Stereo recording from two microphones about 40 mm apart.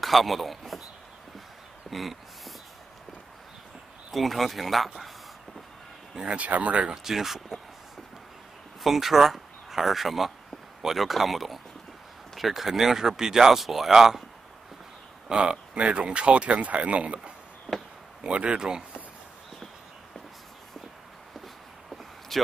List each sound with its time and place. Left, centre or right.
0.0 s speech: centre
1.9 s a sound: centre
4.1 s speech: centre
6.2 s speech: right
6.9 s speech: centre
8.8 s speech: centre
15.2 s speech: right
18.6 s speech: centre
21.8 s a sound: centre